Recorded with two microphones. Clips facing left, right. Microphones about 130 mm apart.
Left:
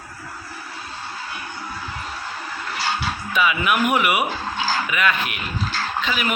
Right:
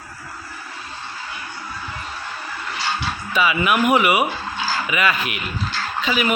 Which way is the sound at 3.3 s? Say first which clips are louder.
Right 2 dB; centre (ahead or behind).